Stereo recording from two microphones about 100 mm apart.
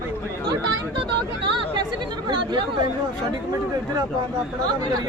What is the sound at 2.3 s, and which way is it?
Speech, 50° right (ahead or behind).